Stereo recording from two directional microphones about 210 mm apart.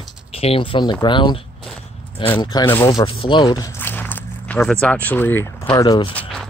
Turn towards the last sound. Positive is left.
turn(degrees=5)  # may be behind; listen again after turning